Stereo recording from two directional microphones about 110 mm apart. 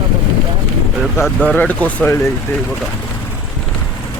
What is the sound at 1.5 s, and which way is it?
Speech, 15° left (ahead or behind).